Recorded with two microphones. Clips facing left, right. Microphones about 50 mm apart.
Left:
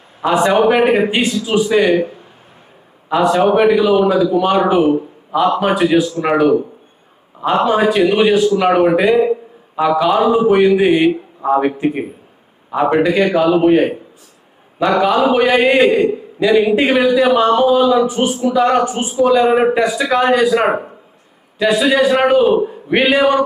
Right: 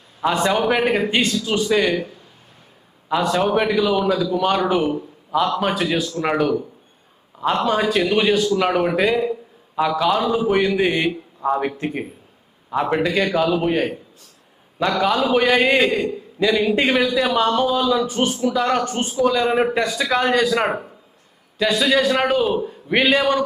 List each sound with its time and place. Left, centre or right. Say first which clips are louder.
0.2 s speech: left 6 dB; centre
3.1 s speech: left 6 dB; centre
9.1 s a man's voice: left 8 dB; left
14.9 s a man's voice: left 5 dB; centre
22.9 s speech: left 4 dB; centre